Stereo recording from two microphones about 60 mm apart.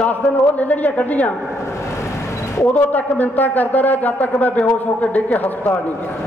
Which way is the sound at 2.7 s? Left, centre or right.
Left.